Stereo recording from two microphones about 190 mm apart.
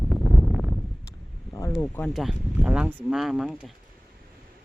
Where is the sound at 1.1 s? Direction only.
15° left (ahead or behind).